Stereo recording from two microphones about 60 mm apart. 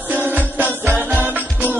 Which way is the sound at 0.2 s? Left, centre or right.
Right.